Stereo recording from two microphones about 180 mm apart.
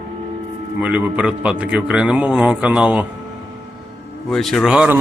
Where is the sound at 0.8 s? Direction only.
5° right (ahead or behind).